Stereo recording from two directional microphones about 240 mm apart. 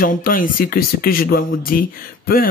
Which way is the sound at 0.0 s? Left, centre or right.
Left.